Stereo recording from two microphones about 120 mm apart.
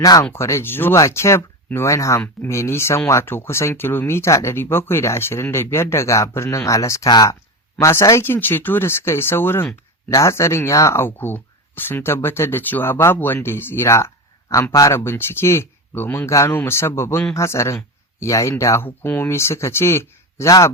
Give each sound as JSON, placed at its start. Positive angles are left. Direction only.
{"t": 0.0, "sound": "speech", "side_deg": 30}